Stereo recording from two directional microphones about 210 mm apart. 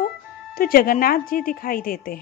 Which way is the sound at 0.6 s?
45° left (ahead or behind).